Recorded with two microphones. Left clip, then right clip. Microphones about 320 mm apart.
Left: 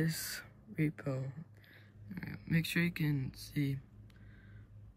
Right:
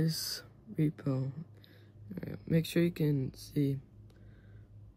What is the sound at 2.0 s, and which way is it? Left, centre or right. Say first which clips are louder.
Speech: right 4 dB; centre.